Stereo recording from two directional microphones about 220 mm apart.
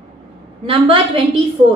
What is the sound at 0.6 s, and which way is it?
Speech, 25° right (ahead or behind).